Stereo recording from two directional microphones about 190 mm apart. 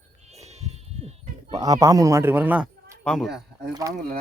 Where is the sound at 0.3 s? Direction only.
35° right (ahead or behind).